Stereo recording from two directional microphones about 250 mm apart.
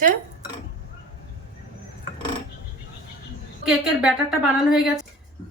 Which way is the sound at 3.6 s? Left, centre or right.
Centre.